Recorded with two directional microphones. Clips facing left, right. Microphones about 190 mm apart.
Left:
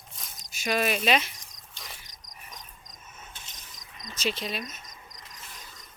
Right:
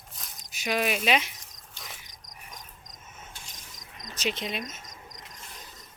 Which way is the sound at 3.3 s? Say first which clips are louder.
Right 1 dB; 20° left (ahead or behind).